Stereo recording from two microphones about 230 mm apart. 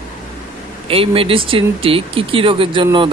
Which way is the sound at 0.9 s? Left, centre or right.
Right.